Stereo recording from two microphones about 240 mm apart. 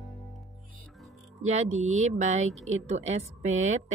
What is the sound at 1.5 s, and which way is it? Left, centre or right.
Speech, right.